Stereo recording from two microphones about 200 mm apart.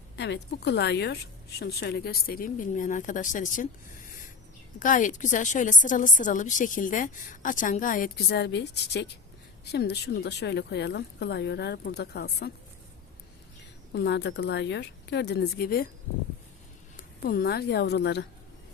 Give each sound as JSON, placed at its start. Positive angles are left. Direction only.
{"t": 0.2, "sound": "speech", "side_deg": 60}
{"t": 4.8, "sound": "a woman's voice", "side_deg": 40}
{"t": 13.9, "sound": "speech", "side_deg": 60}
{"t": 17.0, "sound": "speech", "side_deg": 45}